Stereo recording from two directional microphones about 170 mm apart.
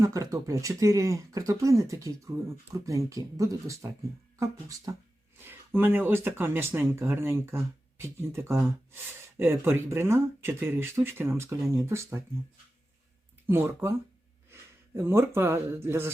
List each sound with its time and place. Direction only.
0.0 s speech: 20° right (ahead or behind)
4.9 s speech: 20° right (ahead or behind)
13.5 s speech: 15° right (ahead or behind)